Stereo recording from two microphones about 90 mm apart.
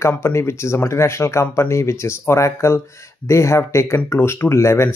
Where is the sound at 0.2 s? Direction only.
30° left (ahead or behind).